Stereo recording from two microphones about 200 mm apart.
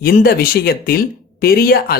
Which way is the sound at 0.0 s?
45° left (ahead or behind).